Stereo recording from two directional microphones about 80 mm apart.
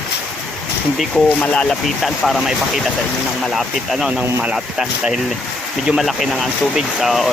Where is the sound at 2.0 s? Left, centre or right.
Centre.